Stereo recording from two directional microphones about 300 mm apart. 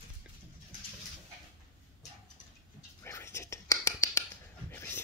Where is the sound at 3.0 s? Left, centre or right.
Centre.